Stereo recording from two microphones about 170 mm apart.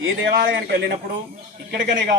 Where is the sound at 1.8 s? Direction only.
90° right.